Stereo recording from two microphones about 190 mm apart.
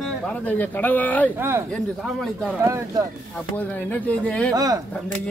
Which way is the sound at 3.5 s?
10° left (ahead or behind).